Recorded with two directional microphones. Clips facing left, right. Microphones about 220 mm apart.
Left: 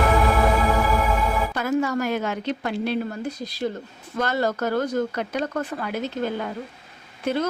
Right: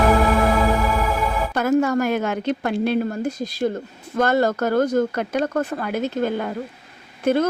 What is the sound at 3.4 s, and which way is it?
Speech, 50° right (ahead or behind).